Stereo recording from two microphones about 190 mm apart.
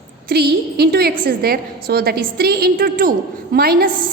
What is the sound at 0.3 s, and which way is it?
A woman's voice, 55° right (ahead or behind).